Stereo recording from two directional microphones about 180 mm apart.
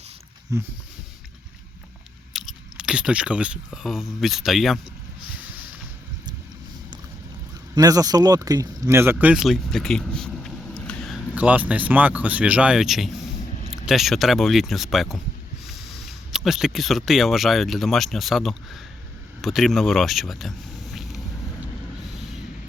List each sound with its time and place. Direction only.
0.5 s speech: 15° right (ahead or behind)
2.3 s speech: centre (ahead or behind)
5.3 s a sound: 10° right (ahead or behind)
7.8 s speech: 20° right (ahead or behind); by 11.2 s 5° left (ahead or behind)
11.3 s speech: 10° right (ahead or behind)
16.3 s speech: centre (ahead or behind)
20.9 s vehicle: centre (ahead or behind)